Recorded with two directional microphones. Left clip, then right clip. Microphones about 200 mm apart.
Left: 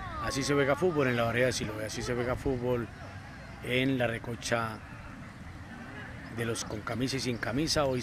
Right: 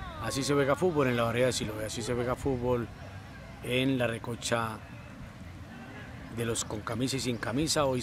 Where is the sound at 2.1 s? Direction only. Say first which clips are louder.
Right 1 dB; 10° right (ahead or behind).